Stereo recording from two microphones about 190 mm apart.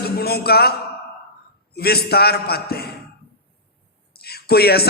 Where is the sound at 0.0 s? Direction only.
55° left (ahead or behind).